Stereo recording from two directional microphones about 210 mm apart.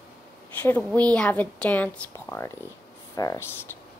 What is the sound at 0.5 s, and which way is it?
A woman's voice, 10° left (ahead or behind).